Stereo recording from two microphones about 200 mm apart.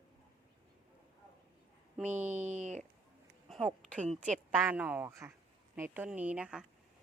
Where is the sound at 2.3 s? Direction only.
35° right (ahead or behind).